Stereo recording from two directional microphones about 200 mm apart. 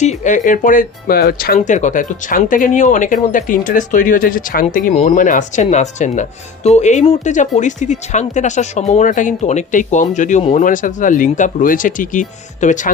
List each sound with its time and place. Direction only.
0.0 s speech: 35° left (ahead or behind)